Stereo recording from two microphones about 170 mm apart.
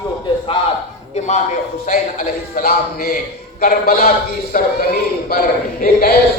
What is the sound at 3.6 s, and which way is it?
A man's voice, 60° left (ahead or behind).